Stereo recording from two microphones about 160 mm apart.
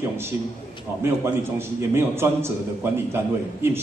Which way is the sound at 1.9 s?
15° right (ahead or behind).